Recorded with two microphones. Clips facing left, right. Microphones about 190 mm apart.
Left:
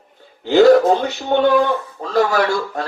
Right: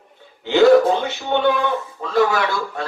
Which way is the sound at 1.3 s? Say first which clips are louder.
Left 4 dB; 40° left (ahead or behind).